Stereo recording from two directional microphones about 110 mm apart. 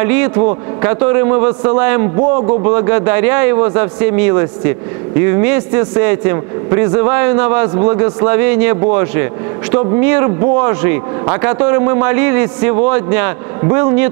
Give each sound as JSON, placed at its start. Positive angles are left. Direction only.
{"t": 0.0, "sound": "speech", "side_deg": -20}